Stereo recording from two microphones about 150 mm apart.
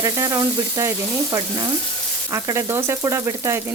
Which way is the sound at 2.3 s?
20° right (ahead or behind).